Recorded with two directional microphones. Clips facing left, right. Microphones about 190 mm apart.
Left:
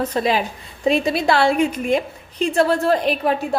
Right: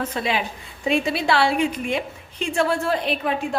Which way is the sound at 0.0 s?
40° left (ahead or behind).